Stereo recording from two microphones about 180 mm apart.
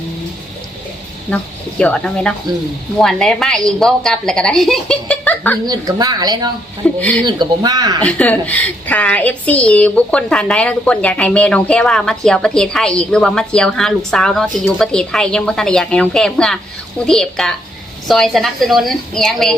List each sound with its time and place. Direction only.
1.8 s a woman's voice: 5° left (ahead or behind)
5.6 s speech: 20° right (ahead or behind)
6.8 s speech: 5° left (ahead or behind)
7.3 s speech: 25° right (ahead or behind)
8.0 s a woman's voice: 10° left (ahead or behind)